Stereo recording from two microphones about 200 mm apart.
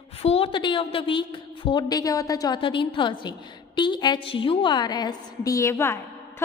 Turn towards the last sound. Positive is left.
turn(degrees=15)  # may be behind; listen again after turning